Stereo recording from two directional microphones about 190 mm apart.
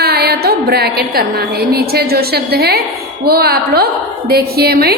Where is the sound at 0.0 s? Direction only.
55° right (ahead or behind).